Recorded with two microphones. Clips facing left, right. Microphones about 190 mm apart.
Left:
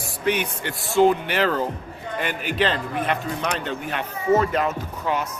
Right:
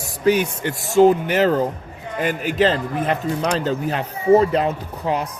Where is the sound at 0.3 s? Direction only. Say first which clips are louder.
Right 6 dB; 40° right (ahead or behind).